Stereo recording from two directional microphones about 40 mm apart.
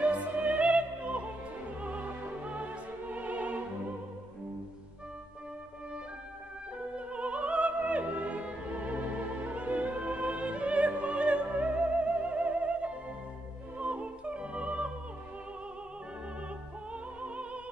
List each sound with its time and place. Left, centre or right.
0.0 s opera: right
2.4 s music: right
7.1 s opera: right
16.9 s music: right